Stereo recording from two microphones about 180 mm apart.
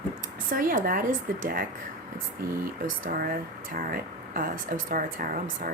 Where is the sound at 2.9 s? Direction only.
50° right (ahead or behind).